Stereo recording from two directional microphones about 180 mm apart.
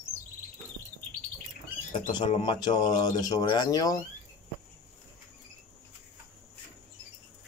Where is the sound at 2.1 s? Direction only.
25° left (ahead or behind).